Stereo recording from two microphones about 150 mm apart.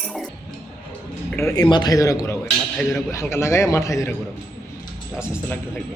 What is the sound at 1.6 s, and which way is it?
Speech, 30° left (ahead or behind).